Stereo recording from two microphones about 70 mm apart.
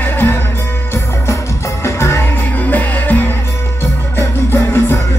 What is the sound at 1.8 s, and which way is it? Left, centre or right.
Music, left.